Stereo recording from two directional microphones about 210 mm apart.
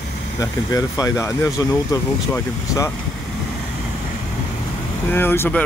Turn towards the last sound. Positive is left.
turn(degrees=10)  # may be behind; listen again after turning